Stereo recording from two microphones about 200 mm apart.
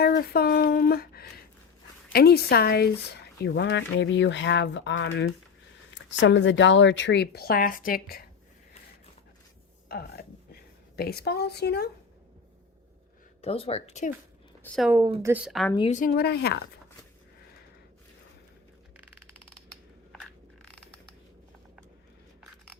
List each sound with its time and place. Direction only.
0.0 s speech: 50° left (ahead or behind)
9.9 s a woman's voice: 50° left (ahead or behind)
13.4 s speech: 30° left (ahead or behind)
14.8 s speech: 5° right (ahead or behind)
15.9 s speech: 45° left (ahead or behind)
20.7 s creak: 5° left (ahead or behind)